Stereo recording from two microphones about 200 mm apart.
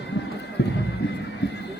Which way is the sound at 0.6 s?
55° left (ahead or behind).